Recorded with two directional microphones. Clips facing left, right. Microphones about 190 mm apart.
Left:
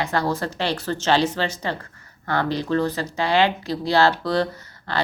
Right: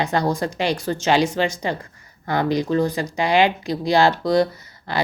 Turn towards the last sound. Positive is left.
turn(degrees=-10)  # may be behind; listen again after turning